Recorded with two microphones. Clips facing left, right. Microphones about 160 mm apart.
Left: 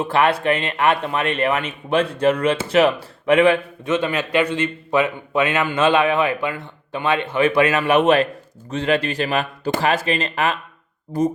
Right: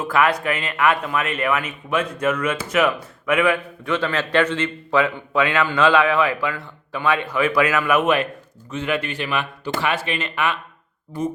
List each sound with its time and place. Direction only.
0.0 s speech: 30° left (ahead or behind)